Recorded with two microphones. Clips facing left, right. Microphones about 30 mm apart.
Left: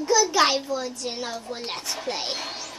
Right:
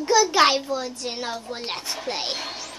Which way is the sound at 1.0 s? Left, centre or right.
Right.